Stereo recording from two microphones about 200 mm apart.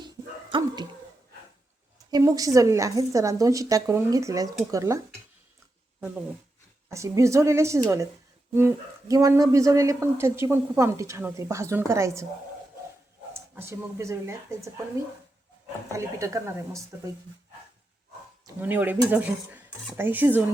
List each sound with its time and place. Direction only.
0.5 s dog: 25° right (ahead or behind)
2.0 s speech: 20° right (ahead or behind)
6.9 s speech: 15° right (ahead or behind)
13.3 s speech: 15° right (ahead or behind)
15.9 s speech: 15° right (ahead or behind)
18.4 s speech: 10° right (ahead or behind)